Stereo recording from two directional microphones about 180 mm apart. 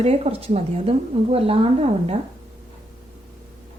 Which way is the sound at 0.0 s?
35° right (ahead or behind).